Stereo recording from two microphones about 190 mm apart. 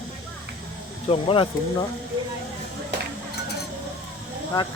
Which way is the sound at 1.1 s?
30° left (ahead or behind).